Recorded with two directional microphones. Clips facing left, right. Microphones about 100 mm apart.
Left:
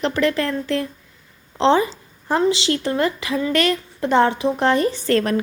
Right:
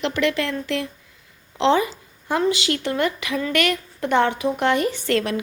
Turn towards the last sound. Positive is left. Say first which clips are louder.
# left 3 dB
turn(degrees=40)  # may be behind; listen again after turning